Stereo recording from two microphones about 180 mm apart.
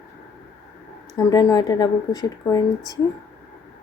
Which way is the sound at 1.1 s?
20° left (ahead or behind).